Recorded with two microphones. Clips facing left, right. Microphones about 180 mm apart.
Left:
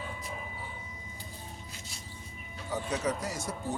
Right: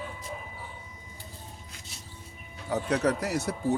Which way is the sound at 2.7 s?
65° right (ahead or behind).